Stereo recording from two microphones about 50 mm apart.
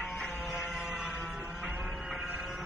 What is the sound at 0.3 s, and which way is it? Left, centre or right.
Music, centre.